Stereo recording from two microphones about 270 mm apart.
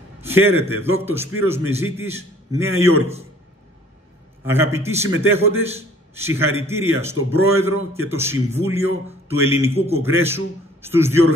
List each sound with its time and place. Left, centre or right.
0.2 s a man's voice: centre
4.5 s a man's voice: centre
9.8 s a man's voice: right
10.0 s a man's voice: centre